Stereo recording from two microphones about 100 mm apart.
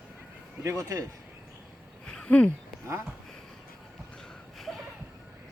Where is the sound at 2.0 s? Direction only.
10° left (ahead or behind).